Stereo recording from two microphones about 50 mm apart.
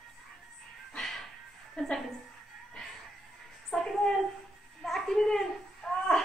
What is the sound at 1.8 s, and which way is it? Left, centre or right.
Speech, centre.